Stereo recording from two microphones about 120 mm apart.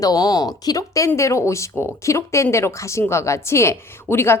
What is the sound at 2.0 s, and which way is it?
A woman's voice, 25° left (ahead or behind).